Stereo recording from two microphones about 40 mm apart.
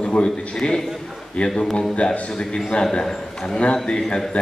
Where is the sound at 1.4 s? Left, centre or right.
Left.